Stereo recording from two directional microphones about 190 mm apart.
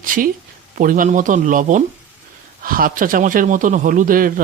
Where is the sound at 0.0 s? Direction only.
45° right (ahead or behind).